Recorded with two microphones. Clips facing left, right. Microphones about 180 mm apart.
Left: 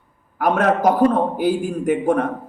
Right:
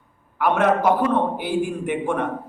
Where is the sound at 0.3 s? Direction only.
40° left (ahead or behind).